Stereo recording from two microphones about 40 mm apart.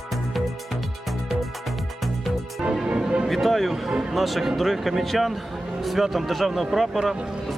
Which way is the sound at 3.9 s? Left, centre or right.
Centre.